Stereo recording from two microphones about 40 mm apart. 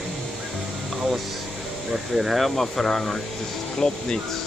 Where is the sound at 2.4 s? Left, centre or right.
Centre.